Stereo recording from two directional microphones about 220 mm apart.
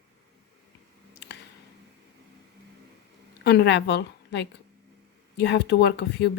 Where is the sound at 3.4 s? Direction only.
50° left (ahead or behind).